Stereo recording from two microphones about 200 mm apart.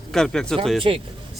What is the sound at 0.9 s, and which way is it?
Speech, 25° right (ahead or behind).